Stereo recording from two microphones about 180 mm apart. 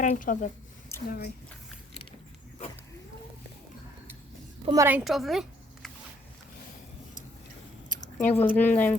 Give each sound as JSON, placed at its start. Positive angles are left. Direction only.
{"t": 0.0, "sound": "speech", "side_deg": 45}
{"t": 0.9, "sound": "a sound", "side_deg": 15}
{"t": 4.6, "sound": "a woman's voice", "side_deg": -20}
{"t": 4.9, "sound": "speech", "side_deg": -5}
{"t": 8.2, "sound": "speech", "side_deg": 10}